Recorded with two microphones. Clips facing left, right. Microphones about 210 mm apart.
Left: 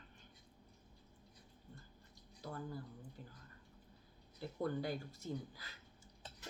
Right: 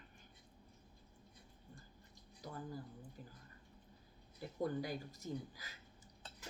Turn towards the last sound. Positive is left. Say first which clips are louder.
# left 1 dB
turn(degrees=-15)  # may be behind; listen again after turning